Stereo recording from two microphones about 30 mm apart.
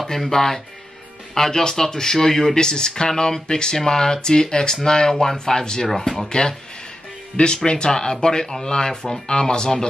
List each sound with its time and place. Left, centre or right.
0.0 s speech: centre
2.5 s speech: left
5.9 s speech: centre
6.1 s speech: left